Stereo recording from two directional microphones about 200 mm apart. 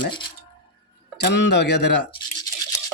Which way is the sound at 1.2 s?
55° left (ahead or behind).